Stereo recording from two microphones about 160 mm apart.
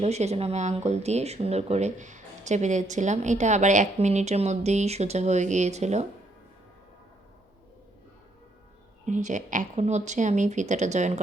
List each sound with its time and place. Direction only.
0.0 s speech: 45° right (ahead or behind)
9.0 s speech: 50° right (ahead or behind)